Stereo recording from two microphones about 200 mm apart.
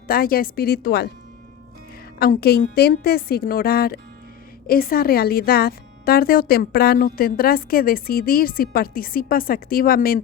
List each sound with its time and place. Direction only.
0.1 s a woman's voice: 45° left (ahead or behind)
2.1 s a woman's voice: 50° left (ahead or behind)